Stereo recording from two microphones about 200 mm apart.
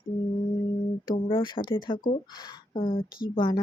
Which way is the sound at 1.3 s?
25° left (ahead or behind).